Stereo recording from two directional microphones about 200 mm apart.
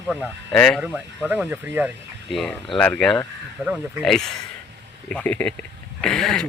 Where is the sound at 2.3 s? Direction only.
Centre (ahead or behind).